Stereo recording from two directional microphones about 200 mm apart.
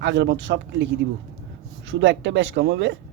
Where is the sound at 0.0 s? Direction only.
65° right (ahead or behind).